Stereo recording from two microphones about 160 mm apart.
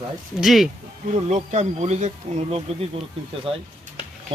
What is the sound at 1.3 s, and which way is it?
Speech, 45° right (ahead or behind).